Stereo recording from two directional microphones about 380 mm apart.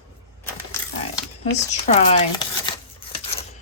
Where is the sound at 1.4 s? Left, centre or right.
Centre.